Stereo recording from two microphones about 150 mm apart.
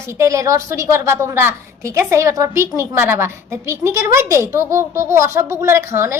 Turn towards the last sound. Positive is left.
turn(degrees=-15)  # may be behind; listen again after turning